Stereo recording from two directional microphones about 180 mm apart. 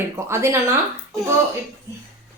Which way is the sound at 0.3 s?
15° right (ahead or behind).